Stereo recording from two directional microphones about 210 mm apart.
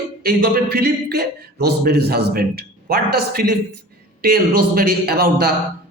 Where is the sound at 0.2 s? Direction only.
45° right (ahead or behind).